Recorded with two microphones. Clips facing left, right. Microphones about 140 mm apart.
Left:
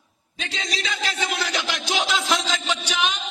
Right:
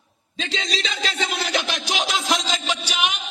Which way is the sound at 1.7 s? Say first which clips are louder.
Left 1 dB; 15° right (ahead or behind).